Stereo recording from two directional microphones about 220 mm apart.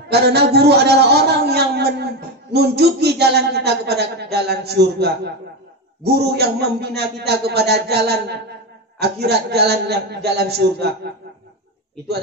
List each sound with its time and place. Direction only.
0.1 s a man's voice: 50° right (ahead or behind)